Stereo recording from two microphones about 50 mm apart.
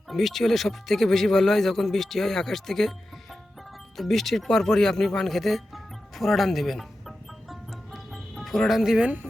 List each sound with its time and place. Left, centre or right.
0.1 s speech: centre
3.9 s speech: centre
7.5 s music: centre